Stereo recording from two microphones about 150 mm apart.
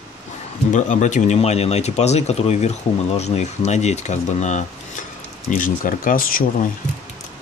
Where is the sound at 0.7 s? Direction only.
55° left (ahead or behind).